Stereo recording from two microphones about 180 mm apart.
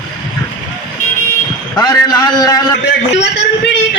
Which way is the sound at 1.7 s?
20° left (ahead or behind).